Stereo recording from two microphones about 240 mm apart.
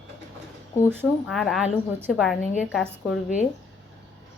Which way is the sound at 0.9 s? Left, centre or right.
Centre.